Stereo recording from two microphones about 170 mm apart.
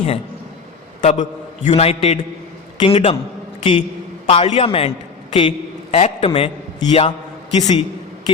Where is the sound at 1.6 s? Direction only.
35° left (ahead or behind).